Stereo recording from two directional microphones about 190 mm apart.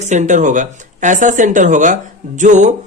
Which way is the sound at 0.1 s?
40° right (ahead or behind).